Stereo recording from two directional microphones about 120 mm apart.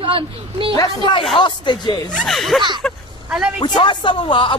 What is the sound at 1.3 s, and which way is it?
Speech, 40° left (ahead or behind).